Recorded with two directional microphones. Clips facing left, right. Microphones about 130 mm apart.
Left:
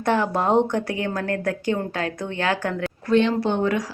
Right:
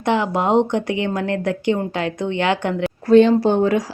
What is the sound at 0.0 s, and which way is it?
Speech, 15° right (ahead or behind).